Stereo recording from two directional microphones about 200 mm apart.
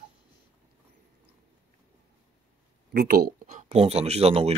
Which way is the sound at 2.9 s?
50° right (ahead or behind).